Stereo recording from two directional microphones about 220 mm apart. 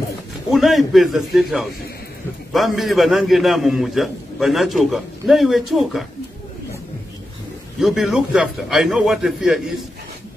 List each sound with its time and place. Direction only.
0.5 s a man's voice: centre (ahead or behind)
7.8 s a man's voice: centre (ahead or behind)